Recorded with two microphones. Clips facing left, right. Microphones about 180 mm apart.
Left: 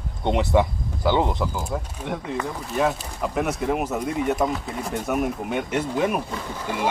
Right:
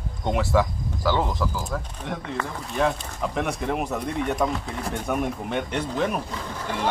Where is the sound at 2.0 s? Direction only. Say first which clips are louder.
Left 3 dB; 5° left (ahead or behind).